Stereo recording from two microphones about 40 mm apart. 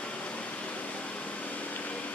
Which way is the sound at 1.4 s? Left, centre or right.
Left.